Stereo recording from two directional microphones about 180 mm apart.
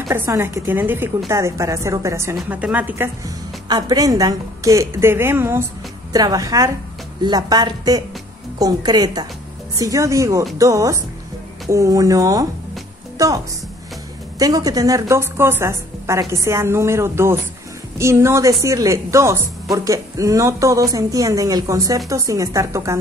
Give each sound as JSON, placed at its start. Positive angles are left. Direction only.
{"t": 0.1, "sound": "a woman's voice", "side_deg": -15}
{"t": 3.6, "sound": "a woman's voice", "side_deg": -20}
{"t": 14.4, "sound": "a woman's voice", "side_deg": -20}